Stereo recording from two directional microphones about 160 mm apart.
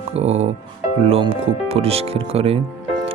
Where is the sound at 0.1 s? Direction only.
40° right (ahead or behind).